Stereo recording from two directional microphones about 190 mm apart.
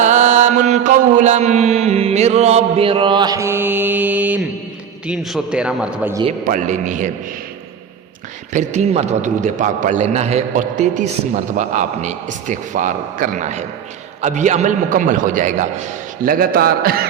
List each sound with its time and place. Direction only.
0.0 s mantra: 40° right (ahead or behind); by 4.4 s 10° right (ahead or behind)
5.0 s a man's voice: centre (ahead or behind)
6.4 s a man's voice: 45° right (ahead or behind)
8.5 s a man's voice: 35° right (ahead or behind); by 16.9 s 50° right (ahead or behind)